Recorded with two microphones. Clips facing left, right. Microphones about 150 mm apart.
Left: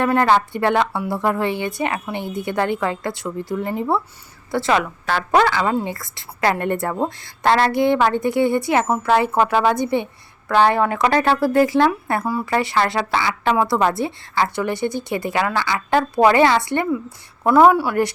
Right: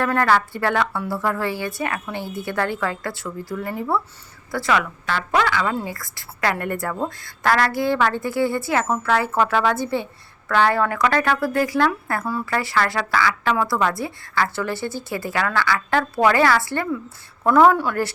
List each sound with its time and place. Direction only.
0.0 s a woman's voice: 20° left (ahead or behind)
5.0 s a woman's voice: 40° left (ahead or behind); by 12.5 s 15° left (ahead or behind)
12.5 s a woman's voice: 25° left (ahead or behind)